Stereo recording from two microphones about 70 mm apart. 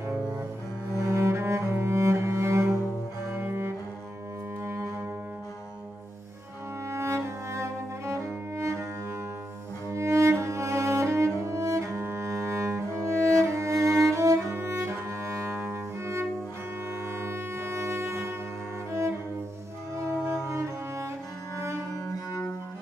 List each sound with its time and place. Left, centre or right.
1.0 s cello: right
6.9 s music: right
9.8 s cello: right
11.4 s music: right
14.5 s music: right
15.6 s cello: right
17.2 s music: right
18.9 s cello: right
20.4 s music: right
21.9 s cello: left